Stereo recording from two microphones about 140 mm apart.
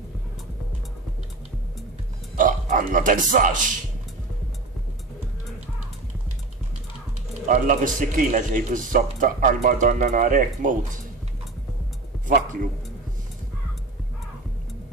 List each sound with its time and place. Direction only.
2.3 s a man's voice: 75° right (ahead or behind)
7.4 s speech: 70° right (ahead or behind)